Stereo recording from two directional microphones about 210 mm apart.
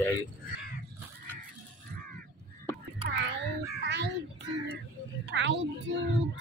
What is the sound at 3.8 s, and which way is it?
Child singing, 55° right (ahead or behind).